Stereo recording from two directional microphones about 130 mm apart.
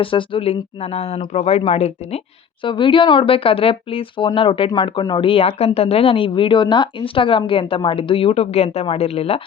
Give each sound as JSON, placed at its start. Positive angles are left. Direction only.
{"t": 0.0, "sound": "speech", "side_deg": 40}
{"t": 2.6, "sound": "speech", "side_deg": 40}